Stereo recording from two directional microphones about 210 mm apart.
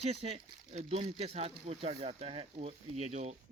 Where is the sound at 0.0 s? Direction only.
30° right (ahead or behind).